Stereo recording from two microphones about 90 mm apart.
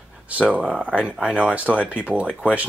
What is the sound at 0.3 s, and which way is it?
Speech, 15° right (ahead or behind).